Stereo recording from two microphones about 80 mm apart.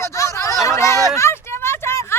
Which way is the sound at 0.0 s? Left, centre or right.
Left.